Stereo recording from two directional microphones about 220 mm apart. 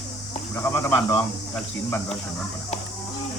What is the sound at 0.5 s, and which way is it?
Speech, 10° left (ahead or behind).